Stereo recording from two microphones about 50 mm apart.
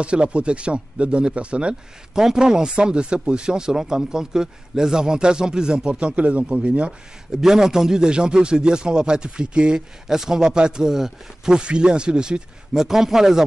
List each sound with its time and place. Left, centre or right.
0.0 s speech: right
7.3 s speech: centre